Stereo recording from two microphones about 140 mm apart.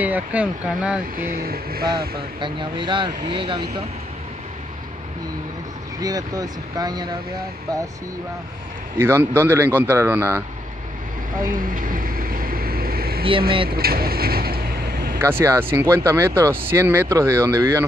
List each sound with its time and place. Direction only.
0.0 s a man's voice: 10° right (ahead or behind)
1.1 s speech: 90° right
2.4 s speech: 35° right (ahead or behind)
5.9 s speech: 25° right (ahead or behind)
8.9 s a man's voice: 15° right (ahead or behind)
11.4 s vehicle: 80° right
13.7 s speech: 90° right
15.1 s a man's voice: 15° right (ahead or behind)